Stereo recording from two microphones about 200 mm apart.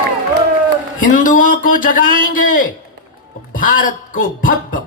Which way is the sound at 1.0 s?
40° left (ahead or behind).